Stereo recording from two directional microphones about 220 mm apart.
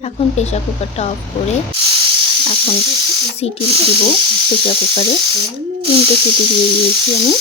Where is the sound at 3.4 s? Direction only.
25° left (ahead or behind).